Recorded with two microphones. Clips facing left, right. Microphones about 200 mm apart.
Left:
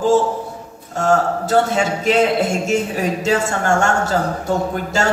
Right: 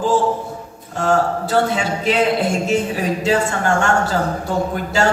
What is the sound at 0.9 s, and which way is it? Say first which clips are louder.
Speech: left 1 dB; 45° left (ahead or behind).